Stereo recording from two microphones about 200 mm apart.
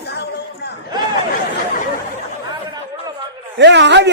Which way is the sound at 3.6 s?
60° right (ahead or behind).